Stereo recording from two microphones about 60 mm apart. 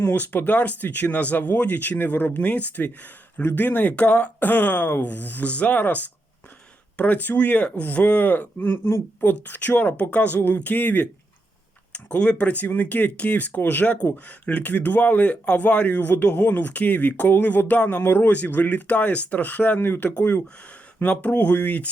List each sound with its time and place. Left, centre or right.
0.2 s speech: left
11.9 s speech: centre